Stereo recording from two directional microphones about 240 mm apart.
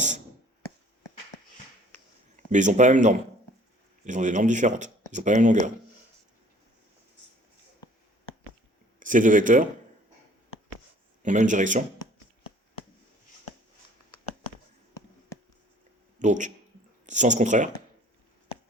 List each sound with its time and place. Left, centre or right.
2.3 s a man's voice: right
9.0 s speech: right
11.2 s a man's voice: right
16.1 s a man's voice: right